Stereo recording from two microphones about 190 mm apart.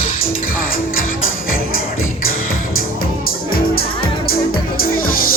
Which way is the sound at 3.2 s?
50° left (ahead or behind).